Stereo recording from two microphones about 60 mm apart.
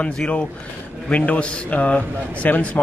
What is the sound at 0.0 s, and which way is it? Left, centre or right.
A man's voice, centre.